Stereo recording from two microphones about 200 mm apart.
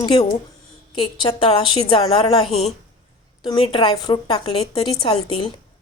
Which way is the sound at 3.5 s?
25° left (ahead or behind).